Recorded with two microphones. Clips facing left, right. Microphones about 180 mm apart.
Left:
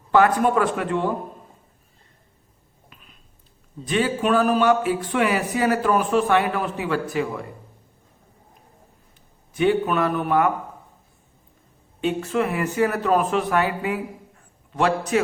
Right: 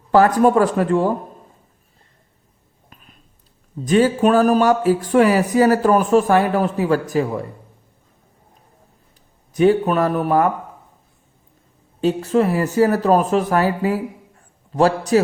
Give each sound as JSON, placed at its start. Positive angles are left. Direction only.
{"t": 0.1, "sound": "speech", "side_deg": -40}
{"t": 2.9, "sound": "a sound", "side_deg": -45}
{"t": 3.8, "sound": "speech", "side_deg": -40}
{"t": 9.6, "sound": "speech", "side_deg": -40}
{"t": 11.9, "sound": "speech", "side_deg": -35}